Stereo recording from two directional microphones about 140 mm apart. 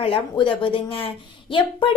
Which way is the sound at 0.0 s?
40° left (ahead or behind).